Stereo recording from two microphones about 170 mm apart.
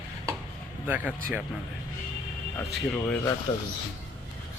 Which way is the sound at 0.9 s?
10° right (ahead or behind).